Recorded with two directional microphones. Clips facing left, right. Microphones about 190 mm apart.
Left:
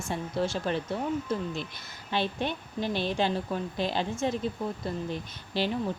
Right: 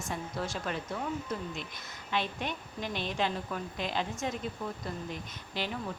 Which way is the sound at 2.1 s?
30° left (ahead or behind).